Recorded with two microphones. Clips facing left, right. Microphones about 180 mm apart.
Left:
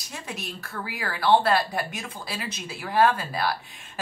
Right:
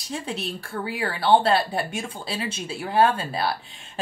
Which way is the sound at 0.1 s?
30° right (ahead or behind).